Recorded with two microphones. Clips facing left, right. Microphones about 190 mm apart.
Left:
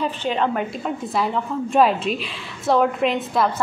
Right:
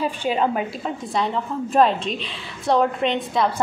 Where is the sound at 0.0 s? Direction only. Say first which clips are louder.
Right 1 dB; 10° right (ahead or behind).